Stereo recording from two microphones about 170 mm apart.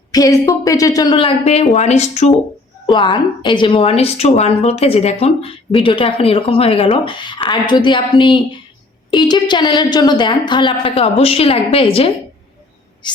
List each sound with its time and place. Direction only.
0.1 s a woman's voice: 20° left (ahead or behind); by 2.3 s 40° left (ahead or behind)
2.8 s a woman's voice: 25° left (ahead or behind)